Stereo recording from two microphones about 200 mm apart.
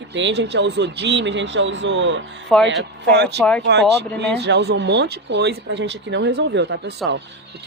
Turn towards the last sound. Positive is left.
turn(degrees=-60)  # may be behind; listen again after turning